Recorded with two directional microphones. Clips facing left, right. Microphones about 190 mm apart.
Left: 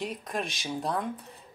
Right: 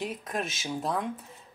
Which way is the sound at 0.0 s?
Centre (ahead or behind).